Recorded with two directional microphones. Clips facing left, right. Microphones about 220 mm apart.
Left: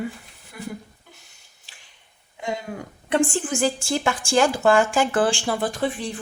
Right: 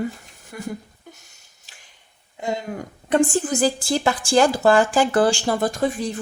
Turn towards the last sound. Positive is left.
turn(degrees=-45)  # may be behind; listen again after turning